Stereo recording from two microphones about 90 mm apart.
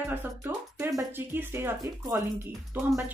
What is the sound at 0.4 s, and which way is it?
Music, 35° right (ahead or behind).